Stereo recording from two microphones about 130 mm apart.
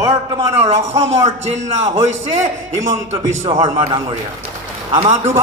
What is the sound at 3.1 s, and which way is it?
Speech, 40° right (ahead or behind).